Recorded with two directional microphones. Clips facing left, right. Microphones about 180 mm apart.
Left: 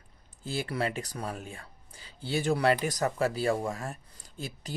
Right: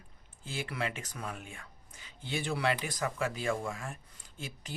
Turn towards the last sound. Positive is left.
turn(degrees=35)  # may be behind; listen again after turning